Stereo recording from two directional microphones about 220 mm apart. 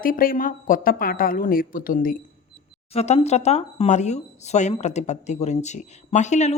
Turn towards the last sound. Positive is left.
turn(degrees=30)  # may be behind; listen again after turning